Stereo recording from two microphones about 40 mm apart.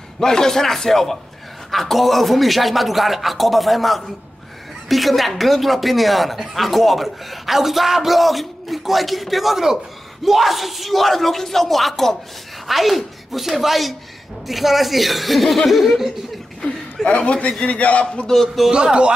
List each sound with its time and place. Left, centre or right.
0.2 s a man's voice: centre
17.0 s a man's voice: left
18.0 s a man's voice: left
18.3 s a man's voice: centre
18.7 s a man's voice: right